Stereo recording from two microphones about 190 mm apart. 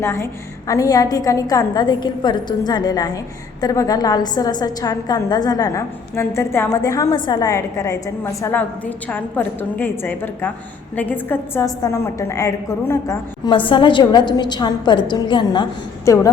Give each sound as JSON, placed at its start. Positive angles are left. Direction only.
{"t": 0.0, "sound": "a woman's voice", "side_deg": 15}